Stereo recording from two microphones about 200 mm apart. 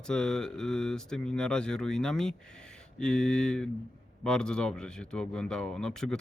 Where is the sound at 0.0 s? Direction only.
5° left (ahead or behind).